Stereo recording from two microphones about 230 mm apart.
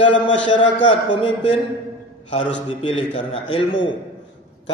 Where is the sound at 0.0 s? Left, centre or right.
Left.